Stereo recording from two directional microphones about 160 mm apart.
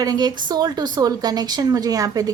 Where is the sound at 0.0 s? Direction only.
25° right (ahead or behind).